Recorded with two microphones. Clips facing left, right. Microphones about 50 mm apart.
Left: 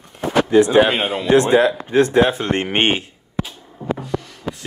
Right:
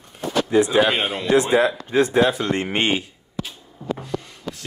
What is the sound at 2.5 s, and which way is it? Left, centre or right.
Speech, left.